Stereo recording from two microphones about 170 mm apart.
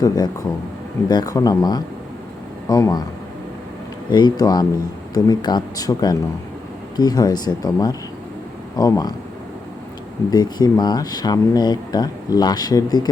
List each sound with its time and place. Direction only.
0.0 s speech: 20° left (ahead or behind)
4.1 s speech: 25° left (ahead or behind)
10.3 s speech: 25° left (ahead or behind)